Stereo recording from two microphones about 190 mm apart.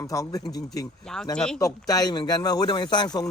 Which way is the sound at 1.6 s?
20° left (ahead or behind).